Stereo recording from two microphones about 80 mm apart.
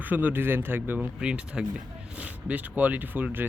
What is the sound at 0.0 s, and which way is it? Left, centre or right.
Speech, right.